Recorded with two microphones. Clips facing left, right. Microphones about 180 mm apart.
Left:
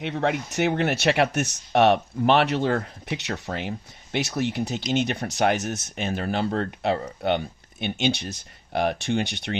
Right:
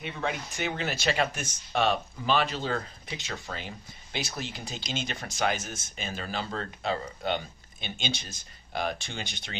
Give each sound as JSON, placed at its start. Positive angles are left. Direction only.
{"t": 0.1, "sound": "speech", "side_deg": 70}